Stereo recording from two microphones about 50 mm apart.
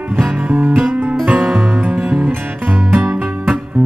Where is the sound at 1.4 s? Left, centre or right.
Centre; by 3.1 s right.